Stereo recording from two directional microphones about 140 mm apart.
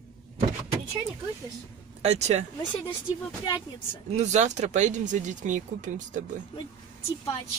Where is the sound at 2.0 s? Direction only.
55° right (ahead or behind).